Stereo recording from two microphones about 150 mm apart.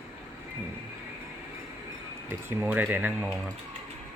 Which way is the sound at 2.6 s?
10° right (ahead or behind).